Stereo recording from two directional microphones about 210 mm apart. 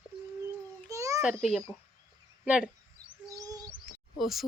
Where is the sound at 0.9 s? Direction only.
15° right (ahead or behind).